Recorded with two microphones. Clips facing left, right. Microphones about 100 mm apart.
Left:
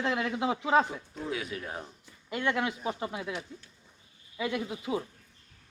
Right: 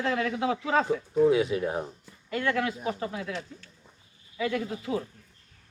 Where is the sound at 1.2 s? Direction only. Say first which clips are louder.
Right 14 dB; 20° right (ahead or behind).